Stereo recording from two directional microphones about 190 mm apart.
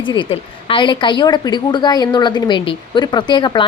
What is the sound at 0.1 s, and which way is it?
A woman's voice, 25° left (ahead or behind).